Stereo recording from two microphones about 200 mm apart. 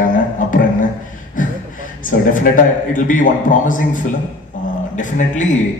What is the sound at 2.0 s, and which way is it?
A man's voice, 40° left (ahead or behind).